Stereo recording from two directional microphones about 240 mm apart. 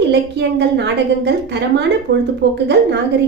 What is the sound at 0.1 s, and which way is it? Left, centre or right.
A woman's voice, right.